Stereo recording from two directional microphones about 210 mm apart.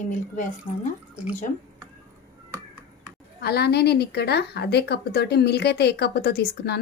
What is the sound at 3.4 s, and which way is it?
A woman's voice, 50° left (ahead or behind).